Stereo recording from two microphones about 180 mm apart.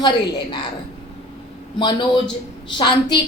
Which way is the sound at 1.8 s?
25° left (ahead or behind).